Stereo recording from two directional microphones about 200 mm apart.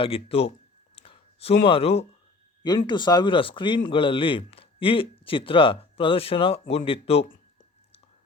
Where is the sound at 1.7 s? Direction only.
30° left (ahead or behind).